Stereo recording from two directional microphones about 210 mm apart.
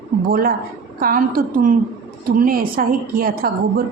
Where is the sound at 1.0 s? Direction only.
40° right (ahead or behind).